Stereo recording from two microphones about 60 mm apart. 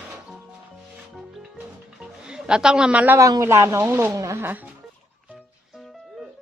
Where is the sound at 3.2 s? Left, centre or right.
Right.